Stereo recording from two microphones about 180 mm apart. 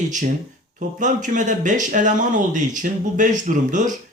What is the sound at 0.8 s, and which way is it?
Speech, 45° right (ahead or behind).